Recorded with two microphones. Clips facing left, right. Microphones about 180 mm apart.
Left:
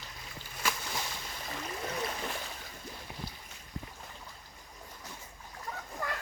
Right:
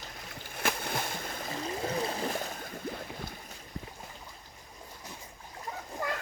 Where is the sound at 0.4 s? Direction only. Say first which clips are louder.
Right 3 dB; 55° right (ahead or behind).